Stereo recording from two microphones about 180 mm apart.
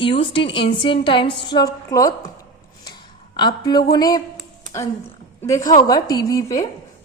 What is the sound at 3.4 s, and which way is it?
Speech, 25° left (ahead or behind).